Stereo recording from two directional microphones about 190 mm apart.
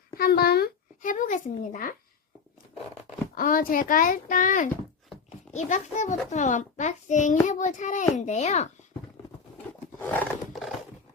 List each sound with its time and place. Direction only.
0.2 s speech: 55° left (ahead or behind)
3.3 s a child's voice: 50° left (ahead or behind)
10.0 s roar: 10° left (ahead or behind)
10.5 s a sound: centre (ahead or behind)